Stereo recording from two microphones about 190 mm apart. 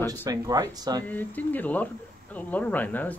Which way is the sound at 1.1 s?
10° left (ahead or behind).